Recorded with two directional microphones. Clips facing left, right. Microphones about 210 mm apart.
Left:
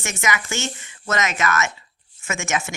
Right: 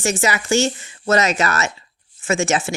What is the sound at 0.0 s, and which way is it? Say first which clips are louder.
Speech: right 5 dB; 35° right (ahead or behind).